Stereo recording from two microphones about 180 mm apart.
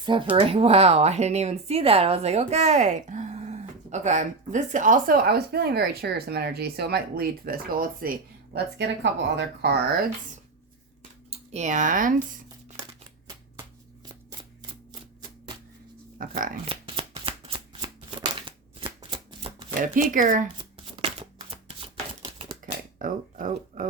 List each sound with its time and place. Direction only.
0.0 s speech: 25° right (ahead or behind); by 8.1 s 55° right (ahead or behind)
8.8 s speech: 75° right (ahead or behind)
11.3 s speech: 40° right (ahead or behind)
16.2 s speech: 50° right (ahead or behind)
16.6 s shuffling cards: 30° right (ahead or behind)
18.3 s shuffling cards: 30° right (ahead or behind)
19.8 s speech: 50° right (ahead or behind)
21.5 s shuffling cards: 30° right (ahead or behind)
22.2 s a sound: 30° right (ahead or behind)
22.6 s a sound: 50° right (ahead or behind)